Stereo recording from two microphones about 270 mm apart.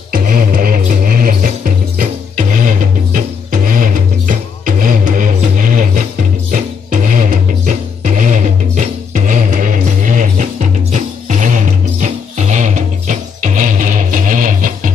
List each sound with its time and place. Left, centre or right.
0.1 s music: right